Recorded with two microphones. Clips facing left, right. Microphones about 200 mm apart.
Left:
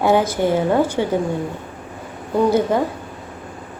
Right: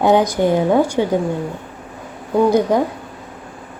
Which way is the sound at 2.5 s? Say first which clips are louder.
Right 2 dB; 15° right (ahead or behind).